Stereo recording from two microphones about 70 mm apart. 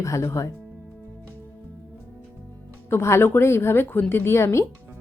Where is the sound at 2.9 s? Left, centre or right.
Left.